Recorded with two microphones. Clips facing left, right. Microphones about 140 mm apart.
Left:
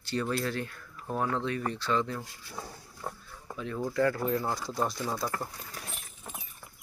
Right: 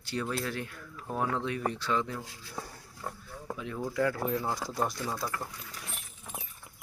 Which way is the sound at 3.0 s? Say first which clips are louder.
Left 1 dB; 10° left (ahead or behind).